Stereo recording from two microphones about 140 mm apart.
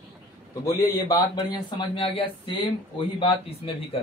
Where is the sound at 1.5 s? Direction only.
35° left (ahead or behind).